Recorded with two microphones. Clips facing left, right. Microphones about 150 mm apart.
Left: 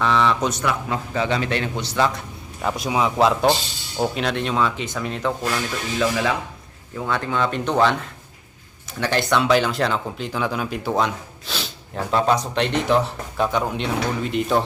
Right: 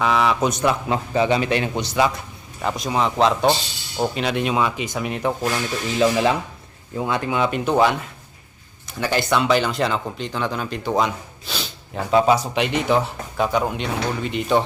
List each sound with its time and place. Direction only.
0.0 s a man's voice: 10° right (ahead or behind)
0.6 s a man's voice: 25° right (ahead or behind)
6.0 s speech: 30° right (ahead or behind)
6.9 s a man's voice: 15° right (ahead or behind); by 14.6 s centre (ahead or behind)